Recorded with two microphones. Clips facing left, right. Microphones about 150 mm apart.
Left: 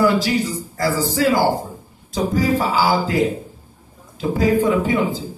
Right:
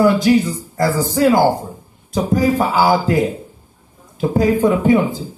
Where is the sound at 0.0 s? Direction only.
50° right (ahead or behind).